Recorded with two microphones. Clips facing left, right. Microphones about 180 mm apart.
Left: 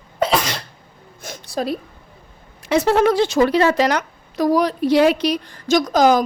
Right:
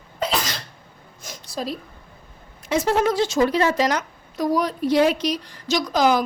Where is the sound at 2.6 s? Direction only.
70° left (ahead or behind).